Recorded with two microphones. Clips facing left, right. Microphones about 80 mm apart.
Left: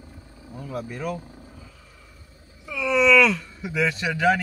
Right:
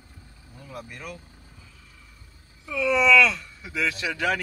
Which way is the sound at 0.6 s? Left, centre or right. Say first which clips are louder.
Left 7 dB; left.